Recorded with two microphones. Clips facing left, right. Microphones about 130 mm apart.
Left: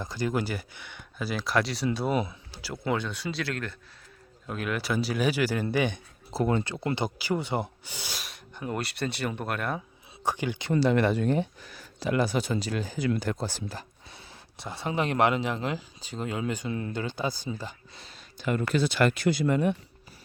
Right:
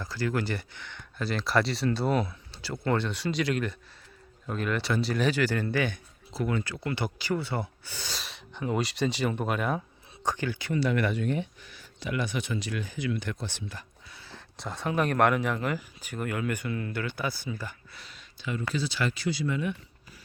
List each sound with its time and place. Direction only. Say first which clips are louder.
0.0 s speech: left 1 dB; 20° left (ahead or behind)
6.3 s speech: left 4 dB; 35° left (ahead or behind); by 8.1 s 15° left (ahead or behind)
8.1 s speech: right 1 dB; 5° left (ahead or behind)
10.2 s speech: left 1 dB; 15° left (ahead or behind)
10.7 s speech: left 4 dB; 30° left (ahead or behind)
14.6 s speech: right 1 dB; 5° left (ahead or behind)
14.8 s speech: right 1 dB; 20° left (ahead or behind); by 19.7 s 50° left (ahead or behind)